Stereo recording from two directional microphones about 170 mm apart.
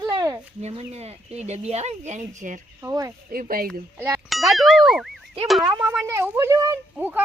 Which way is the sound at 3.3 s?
55° right (ahead or behind).